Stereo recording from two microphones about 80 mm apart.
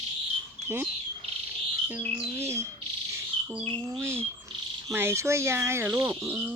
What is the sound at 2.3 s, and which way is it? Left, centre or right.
Speech, right.